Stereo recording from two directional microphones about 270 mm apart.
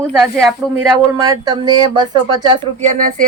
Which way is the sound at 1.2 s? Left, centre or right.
Centre.